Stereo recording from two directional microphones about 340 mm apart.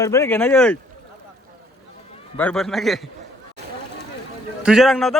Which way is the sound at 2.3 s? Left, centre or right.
Centre.